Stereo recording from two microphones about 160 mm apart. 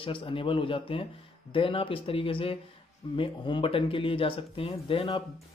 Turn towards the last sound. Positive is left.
turn(degrees=30)  # may be behind; listen again after turning